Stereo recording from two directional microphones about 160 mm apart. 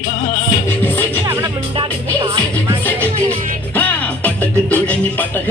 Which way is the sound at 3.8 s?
10° left (ahead or behind).